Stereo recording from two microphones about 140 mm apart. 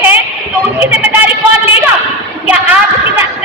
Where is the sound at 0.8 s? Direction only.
10° right (ahead or behind).